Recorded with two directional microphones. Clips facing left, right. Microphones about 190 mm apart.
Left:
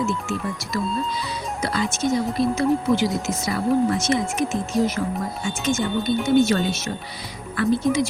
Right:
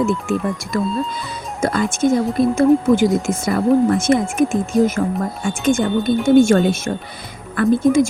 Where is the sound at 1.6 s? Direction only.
50° right (ahead or behind).